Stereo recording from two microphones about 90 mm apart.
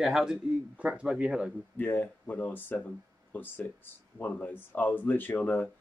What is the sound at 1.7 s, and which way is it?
Speech, 20° left (ahead or behind).